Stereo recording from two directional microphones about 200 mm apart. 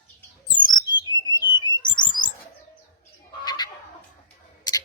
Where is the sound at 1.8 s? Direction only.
20° left (ahead or behind).